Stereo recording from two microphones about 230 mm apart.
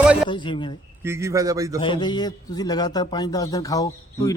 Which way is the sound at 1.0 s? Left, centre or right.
Centre.